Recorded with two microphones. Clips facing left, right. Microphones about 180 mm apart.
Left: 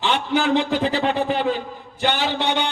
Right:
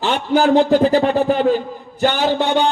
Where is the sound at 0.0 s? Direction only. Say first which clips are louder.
Right 5 dB; 40° right (ahead or behind).